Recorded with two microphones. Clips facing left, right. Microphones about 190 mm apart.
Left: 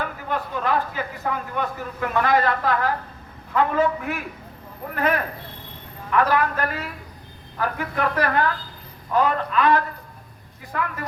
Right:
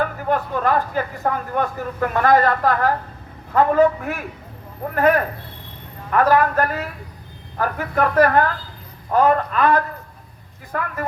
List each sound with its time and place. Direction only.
0.0 s speech: 50° right (ahead or behind)